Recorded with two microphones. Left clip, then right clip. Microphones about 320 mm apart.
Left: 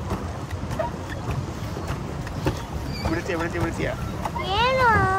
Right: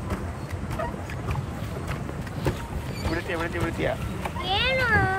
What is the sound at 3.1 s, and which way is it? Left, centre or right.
Speech, centre.